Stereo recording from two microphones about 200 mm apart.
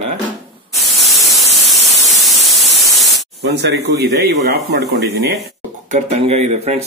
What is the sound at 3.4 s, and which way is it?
Speech, 55° right (ahead or behind).